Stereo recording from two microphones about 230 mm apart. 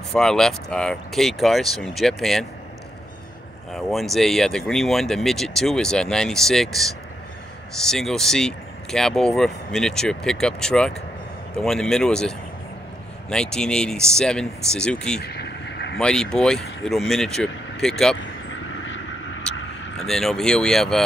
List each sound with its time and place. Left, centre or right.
0.1 s speech: centre
3.7 s speech: centre
15.2 s a sound: left
16.0 s speech: centre
20.1 s speech: centre